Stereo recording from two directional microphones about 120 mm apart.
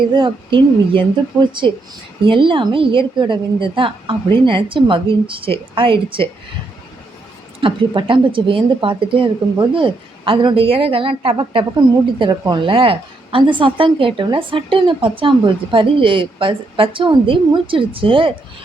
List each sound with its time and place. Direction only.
0.1 s a woman's voice: 45° right (ahead or behind)
7.6 s a woman's voice: 45° right (ahead or behind)